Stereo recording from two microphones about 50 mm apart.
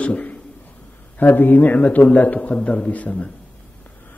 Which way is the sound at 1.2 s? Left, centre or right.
Left.